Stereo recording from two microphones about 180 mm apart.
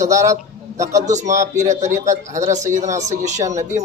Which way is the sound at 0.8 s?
40° right (ahead or behind).